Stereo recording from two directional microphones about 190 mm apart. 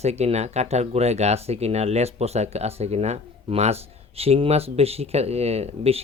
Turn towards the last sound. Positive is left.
turn(degrees=-35)  # may be behind; listen again after turning